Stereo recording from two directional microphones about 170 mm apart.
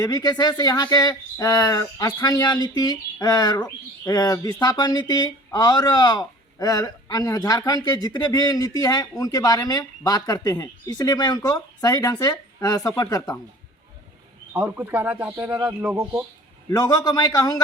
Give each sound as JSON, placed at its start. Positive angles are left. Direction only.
{"t": 0.0, "sound": "speech", "side_deg": 20}
{"t": 14.5, "sound": "a man's voice", "side_deg": -10}
{"t": 16.6, "sound": "speech", "side_deg": 20}